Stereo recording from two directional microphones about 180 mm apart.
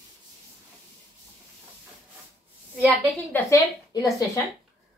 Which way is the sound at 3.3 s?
15° left (ahead or behind).